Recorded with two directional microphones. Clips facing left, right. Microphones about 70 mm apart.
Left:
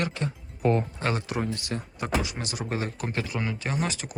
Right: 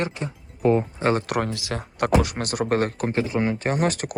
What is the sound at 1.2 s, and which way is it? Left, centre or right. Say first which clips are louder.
Speech: right 4 dB; right.